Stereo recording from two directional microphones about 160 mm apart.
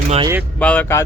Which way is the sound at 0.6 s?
10° left (ahead or behind).